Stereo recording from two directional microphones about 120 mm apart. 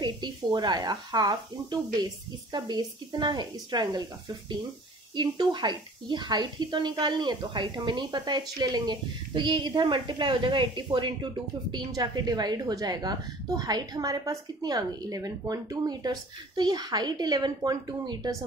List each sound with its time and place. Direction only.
0.0 s a woman's voice: 40° right (ahead or behind)
5.1 s a woman's voice: 40° right (ahead or behind)